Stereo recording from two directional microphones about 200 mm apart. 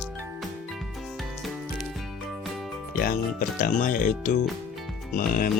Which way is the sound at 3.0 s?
45° left (ahead or behind).